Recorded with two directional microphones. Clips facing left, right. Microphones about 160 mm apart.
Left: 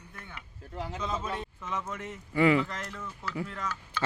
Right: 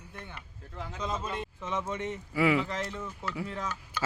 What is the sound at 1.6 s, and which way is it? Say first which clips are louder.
Speech: right 2 dB; 20° right (ahead or behind).